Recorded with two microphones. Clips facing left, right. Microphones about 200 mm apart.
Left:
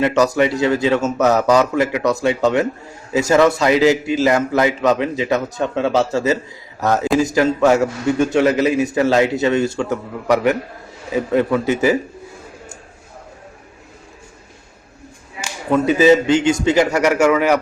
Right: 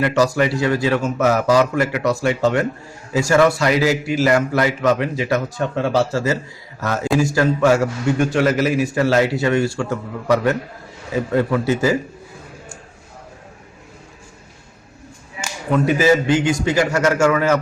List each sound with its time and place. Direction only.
0.0 s a man's voice: 20° left (ahead or behind)
15.9 s a man's voice: 20° left (ahead or behind)